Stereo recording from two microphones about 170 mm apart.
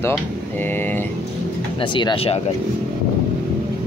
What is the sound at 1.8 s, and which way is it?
Speech, 30° left (ahead or behind).